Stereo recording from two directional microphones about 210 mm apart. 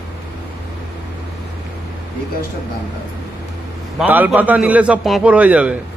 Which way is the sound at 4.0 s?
10° right (ahead or behind).